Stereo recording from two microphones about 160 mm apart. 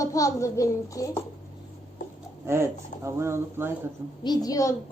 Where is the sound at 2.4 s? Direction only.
15° right (ahead or behind).